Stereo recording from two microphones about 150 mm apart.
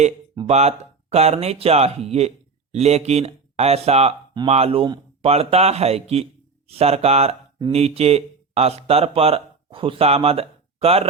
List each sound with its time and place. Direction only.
0.4 s speech: 45° right (ahead or behind)